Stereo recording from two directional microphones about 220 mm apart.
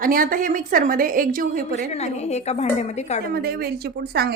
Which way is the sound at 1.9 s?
30° left (ahead or behind).